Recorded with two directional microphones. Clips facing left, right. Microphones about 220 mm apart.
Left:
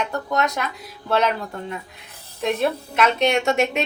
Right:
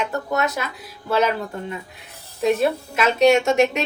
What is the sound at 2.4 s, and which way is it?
A woman's voice, centre (ahead or behind).